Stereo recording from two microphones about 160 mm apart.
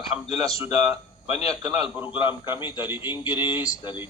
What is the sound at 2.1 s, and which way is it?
A man's voice, 15° right (ahead or behind).